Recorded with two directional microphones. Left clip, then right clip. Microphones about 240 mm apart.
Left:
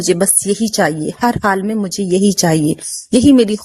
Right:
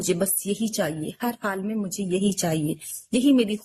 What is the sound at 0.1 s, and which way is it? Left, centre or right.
A woman's voice, left.